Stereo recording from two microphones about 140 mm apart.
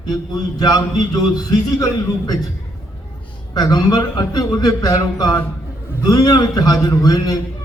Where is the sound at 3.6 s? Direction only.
25° left (ahead or behind).